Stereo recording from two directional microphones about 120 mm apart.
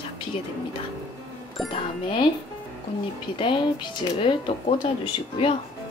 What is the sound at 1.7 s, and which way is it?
Speech, 50° left (ahead or behind).